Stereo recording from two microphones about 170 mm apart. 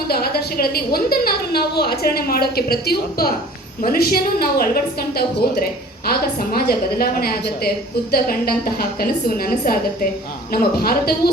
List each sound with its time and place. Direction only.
0.1 s a woman's voice: 65° left (ahead or behind)